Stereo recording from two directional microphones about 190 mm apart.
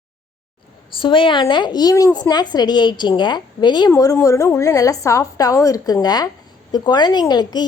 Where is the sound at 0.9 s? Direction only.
25° left (ahead or behind).